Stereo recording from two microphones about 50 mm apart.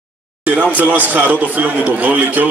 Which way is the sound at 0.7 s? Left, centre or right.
Right.